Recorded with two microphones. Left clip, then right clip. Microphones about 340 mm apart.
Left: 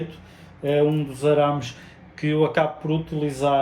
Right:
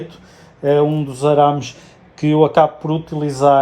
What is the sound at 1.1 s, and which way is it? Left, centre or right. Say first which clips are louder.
Speech: right 7 dB; right.